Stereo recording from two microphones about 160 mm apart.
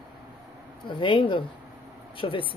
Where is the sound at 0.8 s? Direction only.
30° left (ahead or behind).